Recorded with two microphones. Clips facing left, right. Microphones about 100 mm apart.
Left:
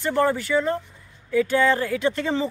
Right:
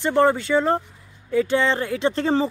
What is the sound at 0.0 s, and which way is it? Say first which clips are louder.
Speech: right 3 dB; 25° right (ahead or behind).